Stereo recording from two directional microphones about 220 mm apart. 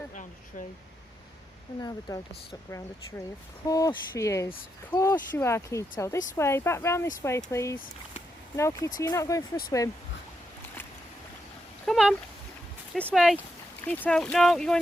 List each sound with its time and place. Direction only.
1.8 s speech: 15° left (ahead or behind)
11.9 s speech: centre (ahead or behind)